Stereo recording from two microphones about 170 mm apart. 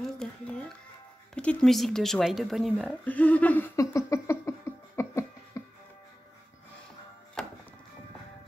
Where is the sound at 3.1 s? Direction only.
10° left (ahead or behind).